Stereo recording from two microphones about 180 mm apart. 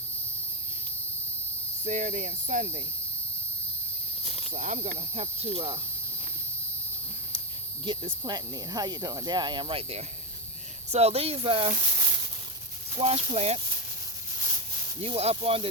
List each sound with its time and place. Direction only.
1.8 s cricket: 40° right (ahead or behind)
4.2 s cricket: 30° right (ahead or behind)
4.9 s speech: 35° right (ahead or behind)
7.9 s speech: 25° right (ahead or behind)
13.0 s speech: 35° right (ahead or behind)
15.0 s speech: 35° right (ahead or behind)